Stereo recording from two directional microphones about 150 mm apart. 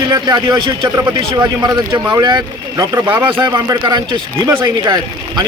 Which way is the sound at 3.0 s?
15° right (ahead or behind).